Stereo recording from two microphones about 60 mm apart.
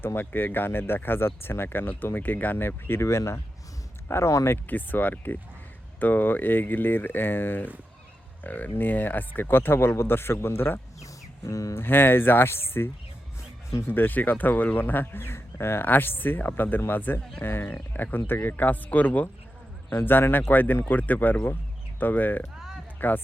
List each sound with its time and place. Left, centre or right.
0.0 s speech: left
3.0 s speech: left
4.5 s speech: left
11.0 s a sound: left
11.7 s speech: left